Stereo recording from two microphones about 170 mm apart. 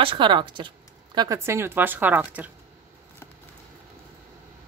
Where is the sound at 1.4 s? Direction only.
15° right (ahead or behind).